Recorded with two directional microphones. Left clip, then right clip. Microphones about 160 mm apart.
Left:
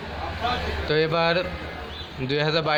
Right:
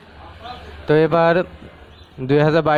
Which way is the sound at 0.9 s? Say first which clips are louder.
Right 8 dB; 55° right (ahead or behind).